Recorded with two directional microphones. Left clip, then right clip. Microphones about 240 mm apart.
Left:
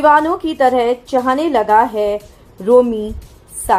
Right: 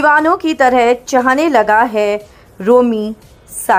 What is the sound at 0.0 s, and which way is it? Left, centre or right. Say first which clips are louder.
A woman's voice: right 1 dB; centre.